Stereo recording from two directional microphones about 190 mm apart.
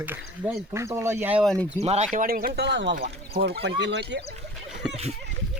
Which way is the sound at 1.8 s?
35° right (ahead or behind).